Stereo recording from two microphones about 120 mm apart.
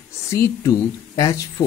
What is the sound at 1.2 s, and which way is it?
Speech, 30° left (ahead or behind).